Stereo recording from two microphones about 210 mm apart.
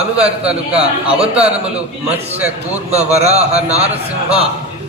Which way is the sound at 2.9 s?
30° right (ahead or behind).